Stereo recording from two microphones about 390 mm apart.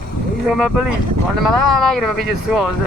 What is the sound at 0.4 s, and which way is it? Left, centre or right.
Speech, centre.